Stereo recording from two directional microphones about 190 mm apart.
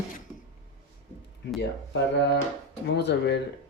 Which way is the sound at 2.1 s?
65° left (ahead or behind).